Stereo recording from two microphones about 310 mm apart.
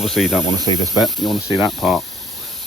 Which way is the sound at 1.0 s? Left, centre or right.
Centre.